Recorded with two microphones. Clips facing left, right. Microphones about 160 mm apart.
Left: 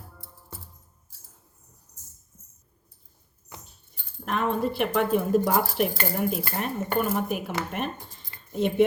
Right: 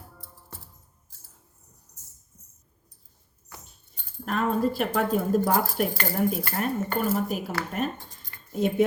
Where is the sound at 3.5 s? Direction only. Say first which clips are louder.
Left 2 dB; 20° left (ahead or behind).